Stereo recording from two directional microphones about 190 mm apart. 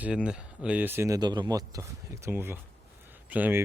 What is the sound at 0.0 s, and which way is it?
Speech, 5° right (ahead or behind).